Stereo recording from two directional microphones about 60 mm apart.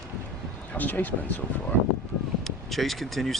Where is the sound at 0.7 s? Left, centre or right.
Left.